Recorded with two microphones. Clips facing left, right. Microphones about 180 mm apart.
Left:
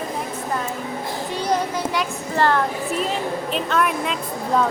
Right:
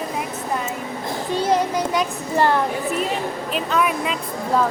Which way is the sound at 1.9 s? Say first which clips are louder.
Right 2 dB; 15° right (ahead or behind).